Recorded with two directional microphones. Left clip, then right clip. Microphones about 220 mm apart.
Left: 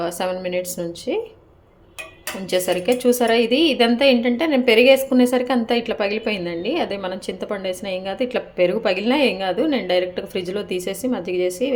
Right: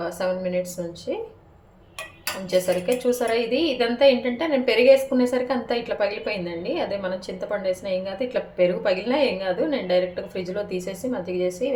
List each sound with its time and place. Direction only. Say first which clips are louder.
0.0 s a woman's voice: left 2 dB; 35° left (ahead or behind)
2.5 s a woman's voice: left 2 dB; 35° left (ahead or behind)